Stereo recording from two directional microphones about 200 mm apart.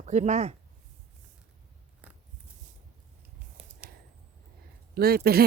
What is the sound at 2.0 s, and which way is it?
Biting, 5° right (ahead or behind).